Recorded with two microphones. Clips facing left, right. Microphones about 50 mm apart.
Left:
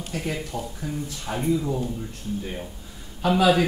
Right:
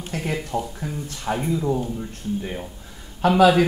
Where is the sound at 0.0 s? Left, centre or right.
Right.